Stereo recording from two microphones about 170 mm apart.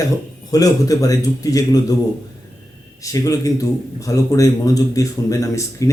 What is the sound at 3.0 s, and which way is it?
A man's voice, 20° left (ahead or behind).